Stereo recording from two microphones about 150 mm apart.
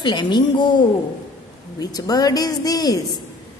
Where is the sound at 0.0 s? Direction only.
30° left (ahead or behind).